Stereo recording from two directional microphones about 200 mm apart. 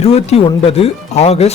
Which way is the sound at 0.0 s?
30° left (ahead or behind).